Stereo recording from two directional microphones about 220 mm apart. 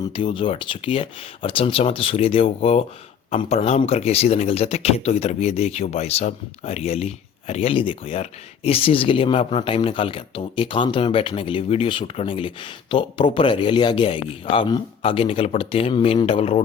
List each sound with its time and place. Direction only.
0.0 s speech: 25° left (ahead or behind)